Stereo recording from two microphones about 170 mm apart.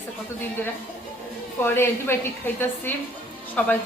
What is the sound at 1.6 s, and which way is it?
A woman's voice, 15° left (ahead or behind).